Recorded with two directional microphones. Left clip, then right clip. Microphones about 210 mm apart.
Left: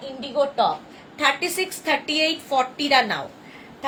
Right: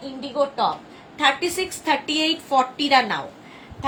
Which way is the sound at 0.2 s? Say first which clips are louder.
Left 1 dB; 15° left (ahead or behind).